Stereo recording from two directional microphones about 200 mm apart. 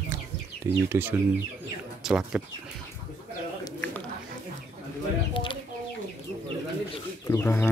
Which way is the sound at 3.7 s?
10° left (ahead or behind).